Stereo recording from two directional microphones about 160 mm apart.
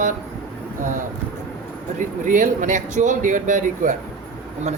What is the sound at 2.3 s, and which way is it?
Speech, 55° right (ahead or behind).